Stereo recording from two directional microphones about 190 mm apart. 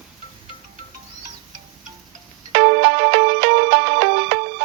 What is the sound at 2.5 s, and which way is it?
Music, 50° right (ahead or behind).